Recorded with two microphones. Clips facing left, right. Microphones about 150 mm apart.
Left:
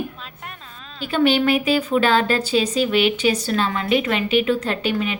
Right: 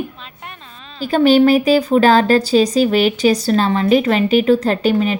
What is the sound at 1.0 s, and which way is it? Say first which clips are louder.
Speech: right 7 dB; 40° right (ahead or behind).